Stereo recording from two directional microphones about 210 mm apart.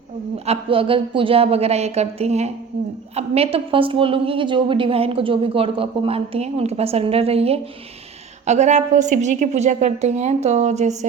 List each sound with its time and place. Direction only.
0.4 s a woman's voice: 25° right (ahead or behind)